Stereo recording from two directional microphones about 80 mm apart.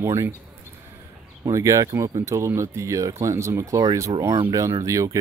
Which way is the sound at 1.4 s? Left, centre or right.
Right.